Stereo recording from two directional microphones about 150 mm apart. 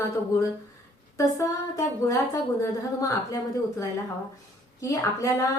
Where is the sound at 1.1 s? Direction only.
20° left (ahead or behind).